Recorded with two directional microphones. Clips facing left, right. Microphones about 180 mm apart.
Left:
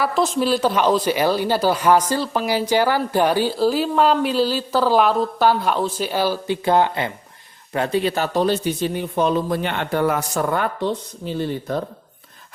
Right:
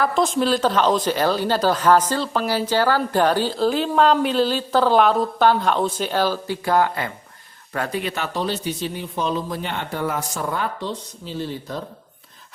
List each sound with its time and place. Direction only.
0.0 s a woman's voice: centre (ahead or behind)
6.7 s speech: 25° left (ahead or behind); by 11.8 s 55° left (ahead or behind)